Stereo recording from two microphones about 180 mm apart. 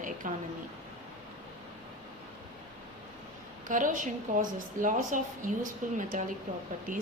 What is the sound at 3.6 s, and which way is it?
A woman's voice, 45° right (ahead or behind).